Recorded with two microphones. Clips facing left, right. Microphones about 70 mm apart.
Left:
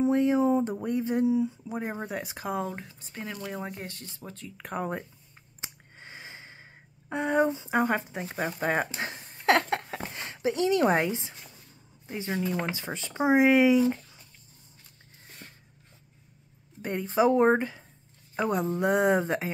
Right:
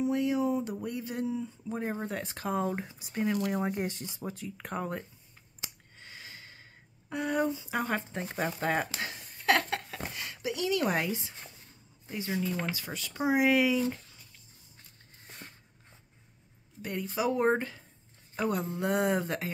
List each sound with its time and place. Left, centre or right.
0.0 s speech: left
1.3 s speech: centre
2.7 s speech: centre
5.6 s a sound: left
8.9 s a sound: left
12.1 s speech: left
16.8 s speech: left